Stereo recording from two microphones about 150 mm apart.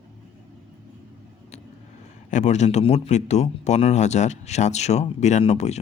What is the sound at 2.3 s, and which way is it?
A man's voice, 50° left (ahead or behind).